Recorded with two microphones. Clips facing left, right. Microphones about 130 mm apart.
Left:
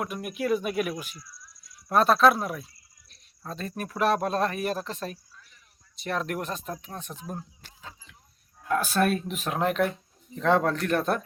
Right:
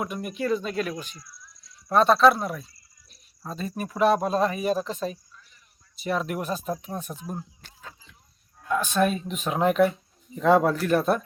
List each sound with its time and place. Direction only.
0.0 s speech: 5° left (ahead or behind)